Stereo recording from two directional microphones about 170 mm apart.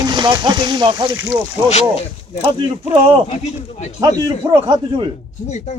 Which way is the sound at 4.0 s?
20° right (ahead or behind).